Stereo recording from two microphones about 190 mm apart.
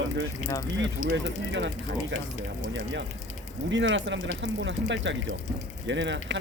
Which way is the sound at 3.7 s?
75° right (ahead or behind).